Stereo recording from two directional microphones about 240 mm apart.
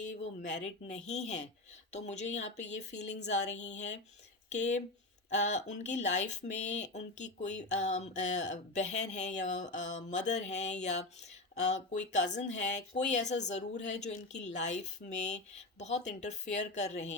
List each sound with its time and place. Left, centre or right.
0.0 s speech: left